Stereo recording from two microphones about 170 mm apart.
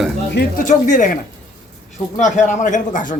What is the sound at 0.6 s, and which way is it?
A man's voice, 50° left (ahead or behind).